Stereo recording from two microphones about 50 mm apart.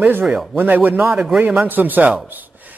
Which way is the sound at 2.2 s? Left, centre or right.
Right.